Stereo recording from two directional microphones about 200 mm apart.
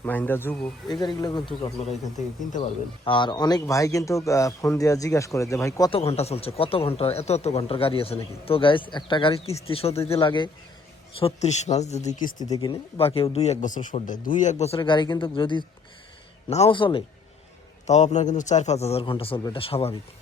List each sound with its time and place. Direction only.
0.0 s a man's voice: 10° left (ahead or behind); by 2.6 s 35° left (ahead or behind)
2.6 s a man's voice: 25° left (ahead or behind)
6.0 s speech: 30° left (ahead or behind)
12.4 s speech: 20° left (ahead or behind); by 14.5 s 40° left (ahead or behind)
14.6 s speech: 25° left (ahead or behind)